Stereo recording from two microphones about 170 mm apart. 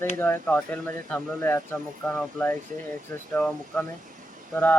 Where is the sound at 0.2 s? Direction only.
10° left (ahead or behind).